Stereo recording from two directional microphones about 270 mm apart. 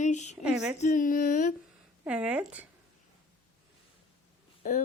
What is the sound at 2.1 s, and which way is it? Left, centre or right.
Speech, centre.